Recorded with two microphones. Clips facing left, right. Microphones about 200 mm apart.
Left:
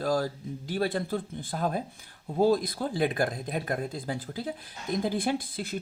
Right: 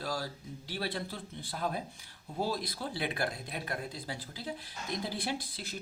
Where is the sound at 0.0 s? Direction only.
50° left (ahead or behind).